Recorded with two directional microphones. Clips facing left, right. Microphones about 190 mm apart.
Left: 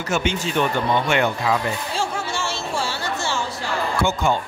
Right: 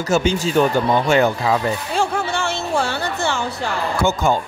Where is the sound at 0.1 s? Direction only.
35° right (ahead or behind).